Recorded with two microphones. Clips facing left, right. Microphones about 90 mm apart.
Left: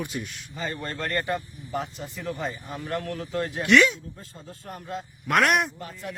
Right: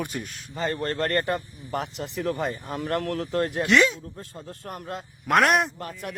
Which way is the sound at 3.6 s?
30° right (ahead or behind).